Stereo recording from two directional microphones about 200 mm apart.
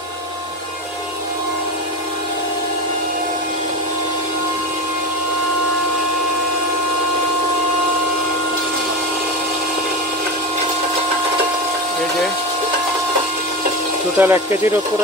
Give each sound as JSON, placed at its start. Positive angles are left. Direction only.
{"t": 14.1, "sound": "speech", "side_deg": -10}